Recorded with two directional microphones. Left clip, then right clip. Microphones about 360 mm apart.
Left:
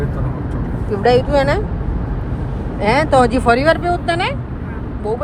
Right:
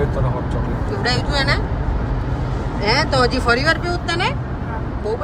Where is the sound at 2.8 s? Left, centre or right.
Centre.